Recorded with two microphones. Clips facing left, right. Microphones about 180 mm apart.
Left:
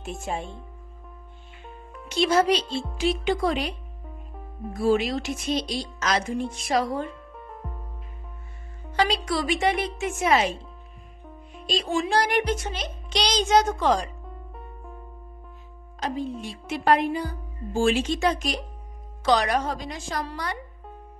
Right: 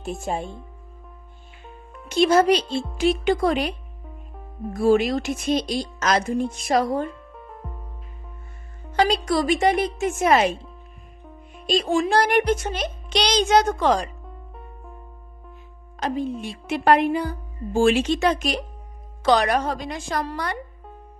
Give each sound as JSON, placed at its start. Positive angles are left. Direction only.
{"t": 0.2, "sound": "speech", "side_deg": -40}
{"t": 2.0, "sound": "a child's voice", "side_deg": -50}
{"t": 4.7, "sound": "a child's voice", "side_deg": -50}
{"t": 7.3, "sound": "music", "side_deg": 0}
{"t": 8.9, "sound": "a child's voice", "side_deg": -45}
{"t": 11.6, "sound": "a child's voice", "side_deg": -50}
{"t": 16.0, "sound": "a woman's voice", "side_deg": -60}